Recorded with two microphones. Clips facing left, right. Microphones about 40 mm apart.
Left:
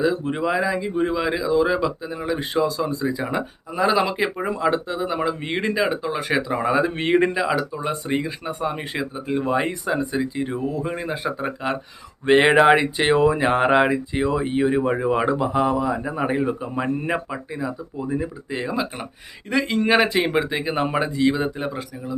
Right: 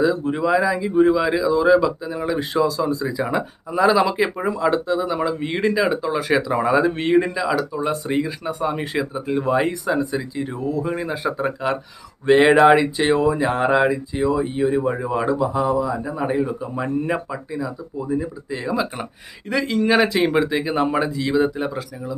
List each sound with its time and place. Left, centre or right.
0.0 s speech: left
7.1 s speech: left; by 11.8 s centre
12.2 s speech: left
16.2 s speech: left
18.7 s speech: centre